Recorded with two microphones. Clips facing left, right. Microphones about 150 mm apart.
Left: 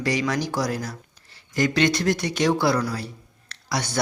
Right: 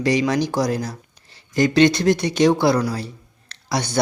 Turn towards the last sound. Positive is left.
turn(degrees=-25)  # may be behind; listen again after turning